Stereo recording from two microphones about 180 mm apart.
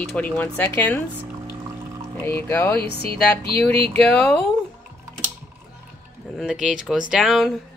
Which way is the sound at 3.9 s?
5° left (ahead or behind).